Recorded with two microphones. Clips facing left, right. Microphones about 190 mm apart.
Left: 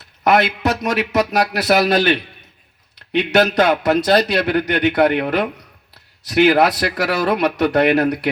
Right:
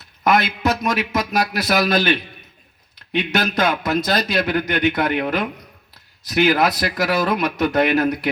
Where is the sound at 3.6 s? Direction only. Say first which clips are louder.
Left 5 dB; 70° left (ahead or behind).